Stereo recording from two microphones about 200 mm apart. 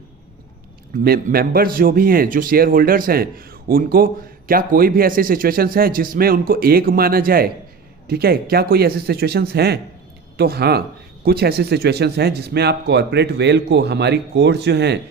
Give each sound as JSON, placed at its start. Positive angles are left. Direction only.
{"t": 1.0, "sound": "a man's voice", "side_deg": -50}